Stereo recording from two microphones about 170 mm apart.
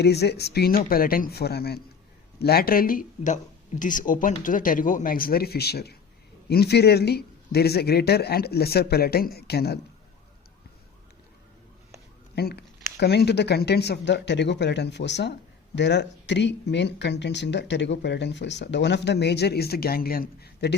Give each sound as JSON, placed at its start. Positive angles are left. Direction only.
{"t": 0.0, "sound": "a man's voice", "side_deg": 75}
{"t": 12.3, "sound": "speech", "side_deg": 70}